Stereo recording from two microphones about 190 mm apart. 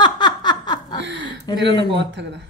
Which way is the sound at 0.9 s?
70° right (ahead or behind).